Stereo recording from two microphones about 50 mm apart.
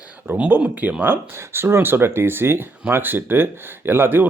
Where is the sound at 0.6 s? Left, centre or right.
Right.